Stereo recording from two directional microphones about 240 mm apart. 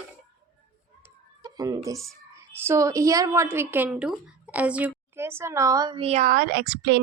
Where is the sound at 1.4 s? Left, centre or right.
Centre.